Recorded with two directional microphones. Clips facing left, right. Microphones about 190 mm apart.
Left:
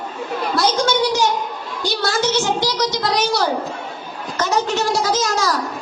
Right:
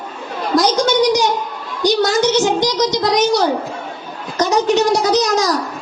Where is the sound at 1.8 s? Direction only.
15° right (ahead or behind).